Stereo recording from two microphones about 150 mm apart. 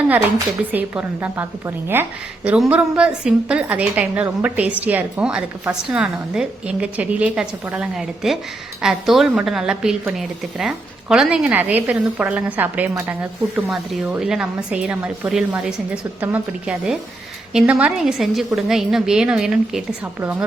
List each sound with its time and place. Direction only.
0.7 s a woman's voice: 10° right (ahead or behind)
13.7 s a woman's voice: 5° right (ahead or behind)